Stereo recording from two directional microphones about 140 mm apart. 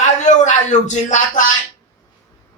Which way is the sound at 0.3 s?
60° left (ahead or behind).